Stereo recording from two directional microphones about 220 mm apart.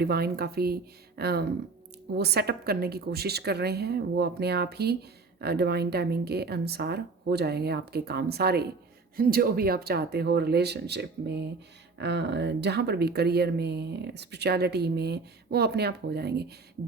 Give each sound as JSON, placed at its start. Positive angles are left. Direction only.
{"t": 0.0, "sound": "speech", "side_deg": -45}